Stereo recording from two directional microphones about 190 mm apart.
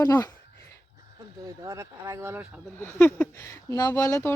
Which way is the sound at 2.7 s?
10° left (ahead or behind).